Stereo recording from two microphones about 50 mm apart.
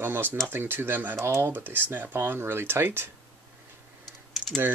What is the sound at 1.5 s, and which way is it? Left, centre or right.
Speech, right.